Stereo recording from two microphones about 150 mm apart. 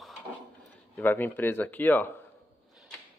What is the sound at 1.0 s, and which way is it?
Speech, 15° left (ahead or behind).